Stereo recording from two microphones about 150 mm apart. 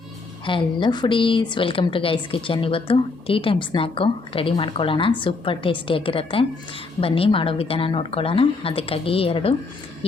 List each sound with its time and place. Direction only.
0.4 s speech: 35° left (ahead or behind)